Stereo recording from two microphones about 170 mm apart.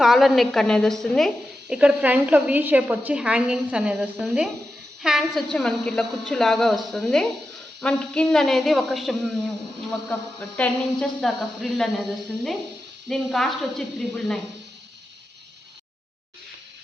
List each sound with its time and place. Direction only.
0.0 s a woman's voice: centre (ahead or behind)
10.6 s a woman's voice: 5° left (ahead or behind)